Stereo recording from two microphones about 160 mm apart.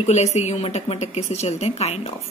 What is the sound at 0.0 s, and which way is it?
A woman's voice, 45° left (ahead or behind).